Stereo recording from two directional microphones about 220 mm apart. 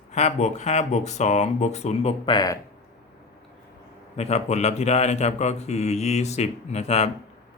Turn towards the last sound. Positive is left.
turn(degrees=30)  # may be behind; listen again after turning